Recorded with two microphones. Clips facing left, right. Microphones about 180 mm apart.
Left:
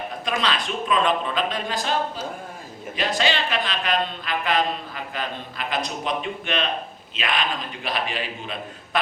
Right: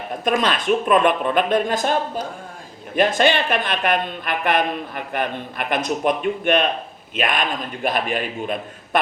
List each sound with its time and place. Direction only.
0.3 s a man's voice: 50° right (ahead or behind)
2.9 s a woman's voice: 50° right (ahead or behind)